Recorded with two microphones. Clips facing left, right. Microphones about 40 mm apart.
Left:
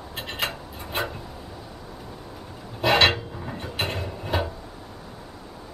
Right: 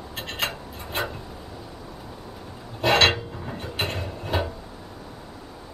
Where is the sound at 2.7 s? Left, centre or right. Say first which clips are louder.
Even; centre.